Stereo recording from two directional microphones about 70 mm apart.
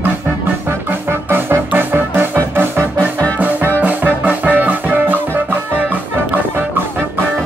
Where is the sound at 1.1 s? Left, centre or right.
Right.